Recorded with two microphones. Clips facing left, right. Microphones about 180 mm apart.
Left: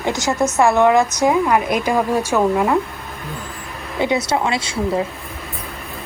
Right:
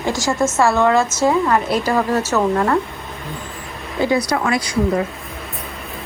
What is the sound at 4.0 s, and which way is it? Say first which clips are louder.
Speech: right 1 dB; 20° left (ahead or behind).